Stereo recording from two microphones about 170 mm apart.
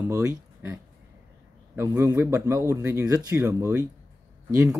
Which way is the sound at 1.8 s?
15° right (ahead or behind).